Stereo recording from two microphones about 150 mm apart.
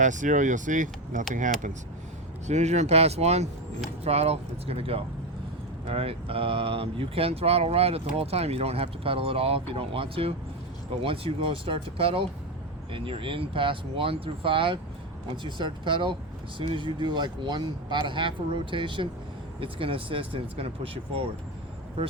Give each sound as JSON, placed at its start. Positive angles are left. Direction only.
{"t": 0.0, "sound": "speech", "side_deg": -55}